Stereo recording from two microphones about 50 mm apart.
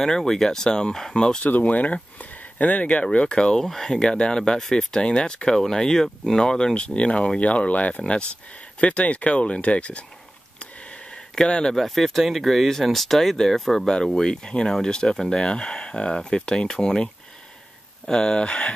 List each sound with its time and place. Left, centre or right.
0.0 s speech: centre
1.4 s speech: left
10.6 s a sound: left
11.7 s speech: centre